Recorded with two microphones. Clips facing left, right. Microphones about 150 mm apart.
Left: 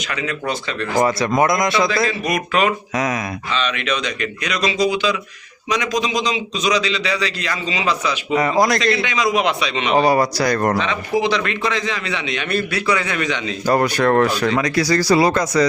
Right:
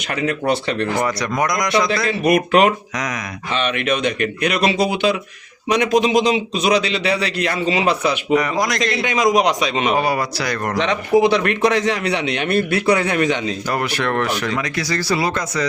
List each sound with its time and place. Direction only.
0.0 s a man's voice: 50° right (ahead or behind)
1.0 s speech: 25° left (ahead or behind)
2.0 s a man's voice: 60° right (ahead or behind)
2.9 s speech: 25° left (ahead or behind)
3.5 s a man's voice: 50° right (ahead or behind)
8.8 s a man's voice: 45° right (ahead or behind)
10.0 s speech: 35° left (ahead or behind)
11.2 s a man's voice: 55° right (ahead or behind)
13.7 s speech: 35° left (ahead or behind)